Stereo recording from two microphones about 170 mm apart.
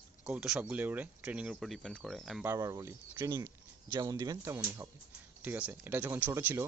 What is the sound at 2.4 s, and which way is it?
Speech, 15° right (ahead or behind).